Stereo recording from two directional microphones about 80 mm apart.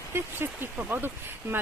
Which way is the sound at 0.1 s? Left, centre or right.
Right.